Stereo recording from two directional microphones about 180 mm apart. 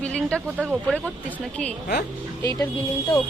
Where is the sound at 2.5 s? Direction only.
20° left (ahead or behind).